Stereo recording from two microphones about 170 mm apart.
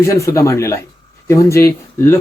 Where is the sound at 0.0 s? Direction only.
15° left (ahead or behind).